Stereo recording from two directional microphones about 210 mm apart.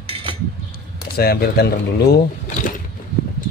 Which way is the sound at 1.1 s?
50° left (ahead or behind).